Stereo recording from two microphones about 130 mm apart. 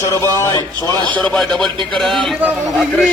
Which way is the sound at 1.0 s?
5° left (ahead or behind).